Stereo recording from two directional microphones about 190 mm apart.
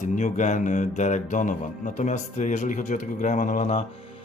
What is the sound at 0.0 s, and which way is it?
Speech, 40° left (ahead or behind).